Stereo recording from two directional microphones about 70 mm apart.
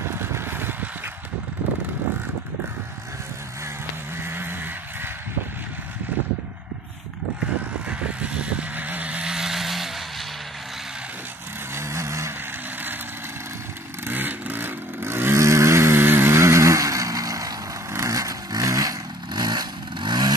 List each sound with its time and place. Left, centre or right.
0.0 s a sound: right
4.2 s vehicle: right
8.0 s vehicle: centre
11.7 s vehicle: right
14.0 s vehicle: right